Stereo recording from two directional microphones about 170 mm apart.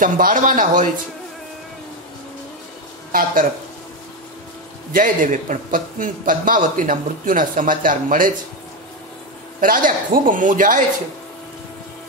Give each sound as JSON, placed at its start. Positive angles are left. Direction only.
{"t": 0.0, "sound": "a man's voice", "side_deg": -50}
{"t": 3.1, "sound": "speech", "side_deg": -55}
{"t": 4.9, "sound": "a man's voice", "side_deg": -55}
{"t": 9.6, "sound": "a man's voice", "side_deg": -55}